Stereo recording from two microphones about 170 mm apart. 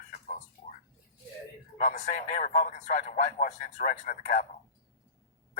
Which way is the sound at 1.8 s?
50° left (ahead or behind).